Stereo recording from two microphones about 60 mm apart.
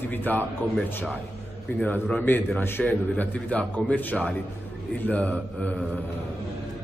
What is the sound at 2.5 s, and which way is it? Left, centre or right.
Speech, left.